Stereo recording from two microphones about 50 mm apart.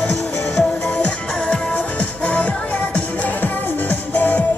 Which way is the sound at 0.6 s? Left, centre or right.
Left.